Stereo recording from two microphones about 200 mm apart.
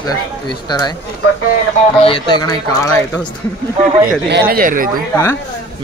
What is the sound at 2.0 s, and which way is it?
Speech, 25° left (ahead or behind).